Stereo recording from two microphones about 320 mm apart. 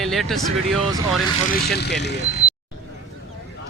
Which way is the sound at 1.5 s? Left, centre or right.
Left.